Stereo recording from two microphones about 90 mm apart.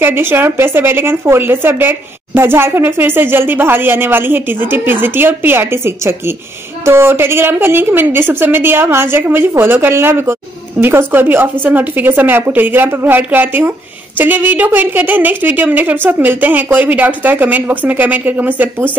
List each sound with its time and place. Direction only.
0.0 s a woman's voice: 25° right (ahead or behind)